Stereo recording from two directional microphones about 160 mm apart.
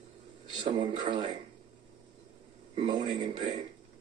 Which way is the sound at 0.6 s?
30° right (ahead or behind).